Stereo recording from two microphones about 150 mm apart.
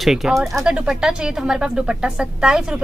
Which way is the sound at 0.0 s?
Centre (ahead or behind).